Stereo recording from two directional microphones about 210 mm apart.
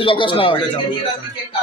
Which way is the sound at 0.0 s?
25° left (ahead or behind).